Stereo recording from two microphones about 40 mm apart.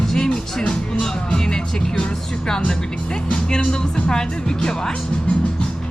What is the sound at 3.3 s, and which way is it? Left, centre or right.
Speech, centre.